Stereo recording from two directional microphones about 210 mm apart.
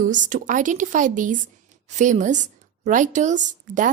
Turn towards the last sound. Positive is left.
turn(degrees=-35)  # may be behind; listen again after turning